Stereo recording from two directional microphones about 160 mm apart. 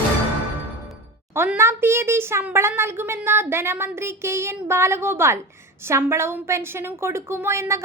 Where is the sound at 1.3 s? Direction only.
15° right (ahead or behind).